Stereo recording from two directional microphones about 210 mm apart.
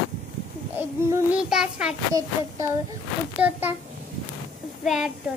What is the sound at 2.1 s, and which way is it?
A child's voice, 15° right (ahead or behind).